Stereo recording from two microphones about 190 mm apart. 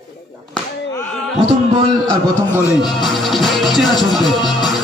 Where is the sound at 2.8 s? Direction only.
Centre (ahead or behind).